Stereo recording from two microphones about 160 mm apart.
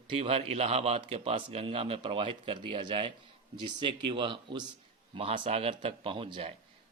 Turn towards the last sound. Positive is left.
turn(degrees=-35)  # may be behind; listen again after turning